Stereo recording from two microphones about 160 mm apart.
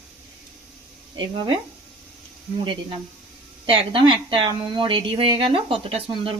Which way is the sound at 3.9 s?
35° right (ahead or behind).